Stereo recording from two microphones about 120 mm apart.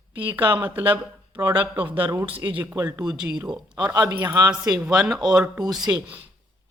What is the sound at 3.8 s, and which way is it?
Speech, 30° right (ahead or behind).